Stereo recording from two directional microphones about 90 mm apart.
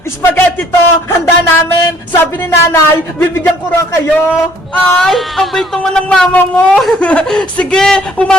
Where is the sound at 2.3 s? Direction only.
25° left (ahead or behind).